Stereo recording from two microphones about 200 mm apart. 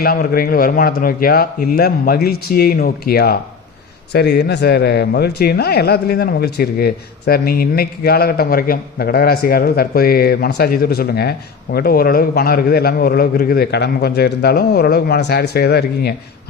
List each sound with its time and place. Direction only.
0.0 s speech: 50° left (ahead or behind)